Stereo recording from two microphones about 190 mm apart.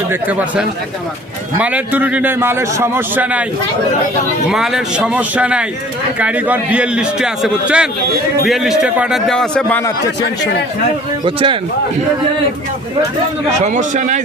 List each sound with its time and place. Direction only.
0.1 s a man's voice: 10° right (ahead or behind)
4.4 s a man's voice: 5° right (ahead or behind)
11.3 s speech: 25° right (ahead or behind)
13.6 s a man's voice: 40° right (ahead or behind)